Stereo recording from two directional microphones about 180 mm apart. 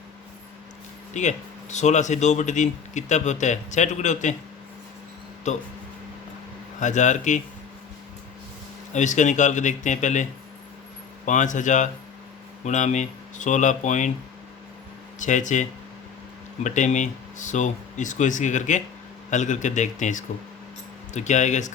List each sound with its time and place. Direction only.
1.1 s speech: 40° left (ahead or behind)
5.5 s speech: 40° left (ahead or behind)
6.7 s speech: 40° left (ahead or behind)
8.9 s speech: 40° left (ahead or behind)
11.3 s speech: 45° left (ahead or behind)
15.2 s speech: 45° left (ahead or behind)
16.6 s speech: 45° left (ahead or behind)